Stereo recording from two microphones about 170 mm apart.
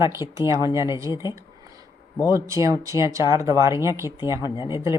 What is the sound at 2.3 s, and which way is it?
Speech, 20° right (ahead or behind).